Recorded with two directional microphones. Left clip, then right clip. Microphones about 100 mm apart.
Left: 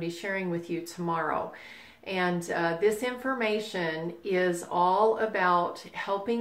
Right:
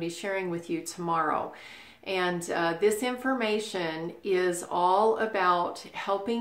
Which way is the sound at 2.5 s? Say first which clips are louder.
Right 1 dB; 20° right (ahead or behind).